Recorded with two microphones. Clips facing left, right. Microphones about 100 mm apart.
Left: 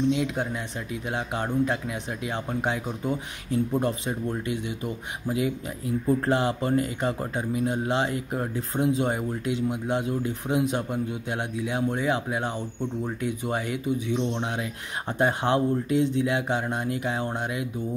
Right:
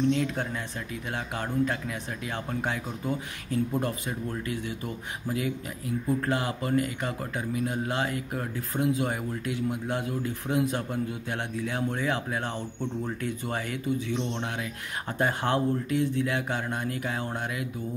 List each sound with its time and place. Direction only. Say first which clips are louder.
0.1 s speech: left 1 dB; 15° left (ahead or behind)